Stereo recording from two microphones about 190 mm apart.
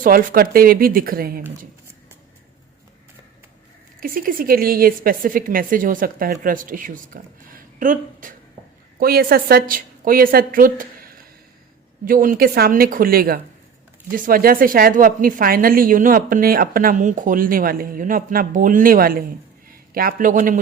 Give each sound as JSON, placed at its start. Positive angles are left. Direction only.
{"t": 0.0, "sound": "a woman's voice", "side_deg": -45}
{"t": 4.0, "sound": "a woman's voice", "side_deg": -45}
{"t": 12.0, "sound": "a woman's voice", "side_deg": -45}